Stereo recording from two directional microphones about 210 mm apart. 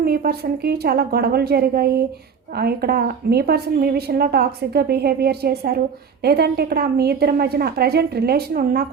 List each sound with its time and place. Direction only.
0.0 s a woman's voice: 45° right (ahead or behind)